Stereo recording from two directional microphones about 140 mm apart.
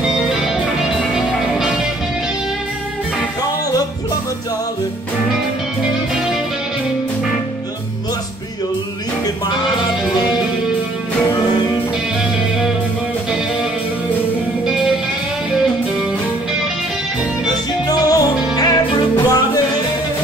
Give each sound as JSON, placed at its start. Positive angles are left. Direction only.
{"t": 0.3, "sound": "music", "side_deg": -5}
{"t": 17.5, "sound": "music", "side_deg": 25}